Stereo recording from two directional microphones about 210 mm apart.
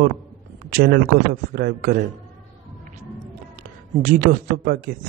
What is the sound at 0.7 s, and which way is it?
Speech, 45° right (ahead or behind).